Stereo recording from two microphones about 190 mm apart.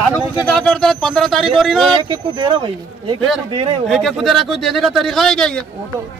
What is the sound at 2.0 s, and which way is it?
Speech, 25° right (ahead or behind).